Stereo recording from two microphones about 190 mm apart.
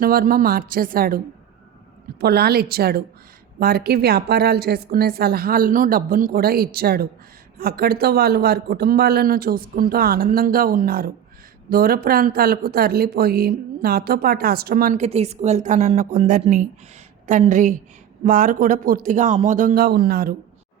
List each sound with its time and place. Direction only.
0.0 s speech: 50° right (ahead or behind)
2.2 s a woman's voice: 55° right (ahead or behind)